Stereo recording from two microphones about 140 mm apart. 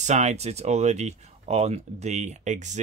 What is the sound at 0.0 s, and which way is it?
Speech, 55° right (ahead or behind).